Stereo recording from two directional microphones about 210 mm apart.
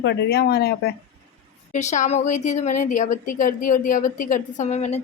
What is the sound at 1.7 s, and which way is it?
A woman's voice, 35° left (ahead or behind).